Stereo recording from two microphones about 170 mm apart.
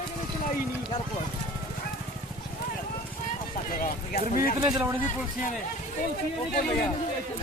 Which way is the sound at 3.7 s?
55° left (ahead or behind).